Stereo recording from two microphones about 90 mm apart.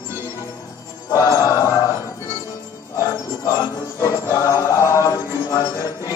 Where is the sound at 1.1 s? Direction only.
35° left (ahead or behind).